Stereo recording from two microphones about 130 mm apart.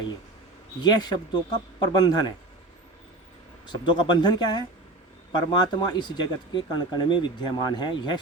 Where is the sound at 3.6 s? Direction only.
35° left (ahead or behind).